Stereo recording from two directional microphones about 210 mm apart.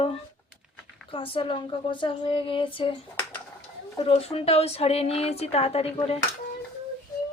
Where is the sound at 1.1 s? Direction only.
25° left (ahead or behind).